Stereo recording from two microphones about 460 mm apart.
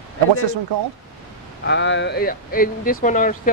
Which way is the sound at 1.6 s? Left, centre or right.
Left.